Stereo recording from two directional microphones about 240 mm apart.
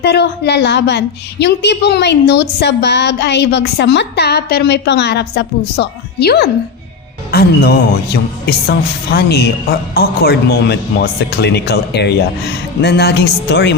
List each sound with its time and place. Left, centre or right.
0.0 s speech: left